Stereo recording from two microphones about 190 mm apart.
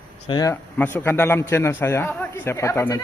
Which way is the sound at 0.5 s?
10° left (ahead or behind).